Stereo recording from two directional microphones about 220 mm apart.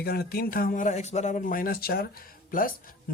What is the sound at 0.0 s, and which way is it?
Speech, 45° left (ahead or behind).